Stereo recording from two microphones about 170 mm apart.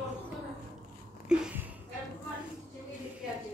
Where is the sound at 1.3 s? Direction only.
5° right (ahead or behind).